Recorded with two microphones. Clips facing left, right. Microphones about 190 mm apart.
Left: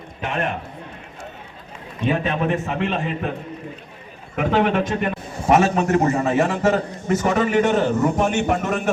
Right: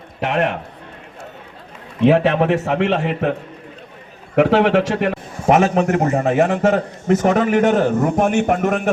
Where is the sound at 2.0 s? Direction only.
80° right.